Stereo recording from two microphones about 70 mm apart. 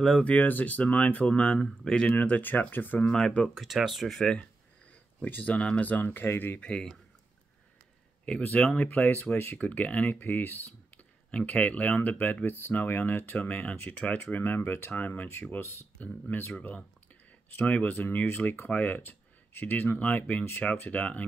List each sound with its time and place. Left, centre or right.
0.2 s speech: left
3.1 s speech: centre
4.1 s speech: centre
5.2 s speech: left
6.6 s speech: centre
8.7 s speech: left
9.0 s speech: left
10.2 s speech: left
11.0 s speech: centre
13.4 s speech: centre
14.4 s speech: left
16.3 s speech: left
17.6 s speech: left